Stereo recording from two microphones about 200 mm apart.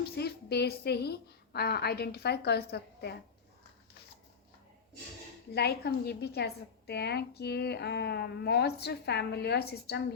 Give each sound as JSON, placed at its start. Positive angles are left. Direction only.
{"t": 0.2, "sound": "a woman's voice", "side_deg": 55}
{"t": 5.5, "sound": "a woman's voice", "side_deg": 55}